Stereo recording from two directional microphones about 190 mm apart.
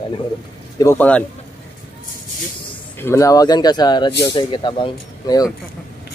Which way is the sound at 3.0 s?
15° left (ahead or behind).